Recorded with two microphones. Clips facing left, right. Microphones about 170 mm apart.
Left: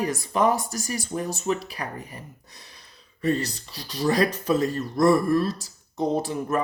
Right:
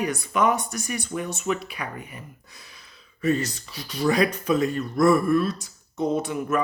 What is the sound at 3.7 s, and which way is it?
Speech, 35° left (ahead or behind).